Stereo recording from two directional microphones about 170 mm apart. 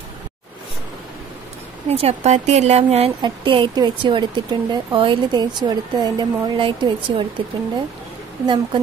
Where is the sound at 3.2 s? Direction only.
30° right (ahead or behind).